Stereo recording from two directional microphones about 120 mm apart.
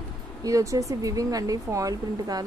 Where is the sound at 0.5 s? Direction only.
25° right (ahead or behind).